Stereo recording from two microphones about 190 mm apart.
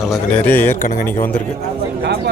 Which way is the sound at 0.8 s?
45° left (ahead or behind).